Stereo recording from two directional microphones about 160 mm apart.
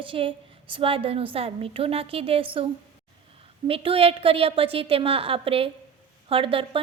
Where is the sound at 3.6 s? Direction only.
35° right (ahead or behind).